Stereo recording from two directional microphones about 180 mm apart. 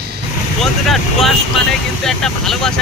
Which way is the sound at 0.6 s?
Centre (ahead or behind).